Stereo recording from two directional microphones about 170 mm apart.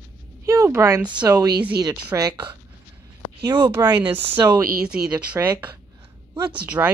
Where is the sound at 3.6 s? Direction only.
25° right (ahead or behind).